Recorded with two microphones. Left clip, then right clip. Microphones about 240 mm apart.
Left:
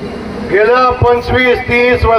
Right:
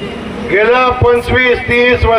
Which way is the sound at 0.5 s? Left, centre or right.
Right.